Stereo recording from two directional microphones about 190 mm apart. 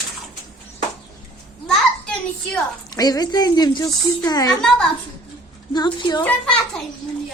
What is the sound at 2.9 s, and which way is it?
Speech, 20° left (ahead or behind).